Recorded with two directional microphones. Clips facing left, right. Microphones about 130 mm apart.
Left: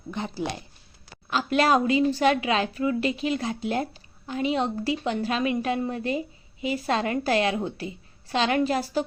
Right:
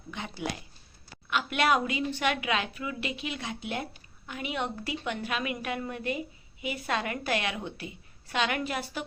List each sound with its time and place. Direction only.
0.1 s a woman's voice: 35° left (ahead or behind)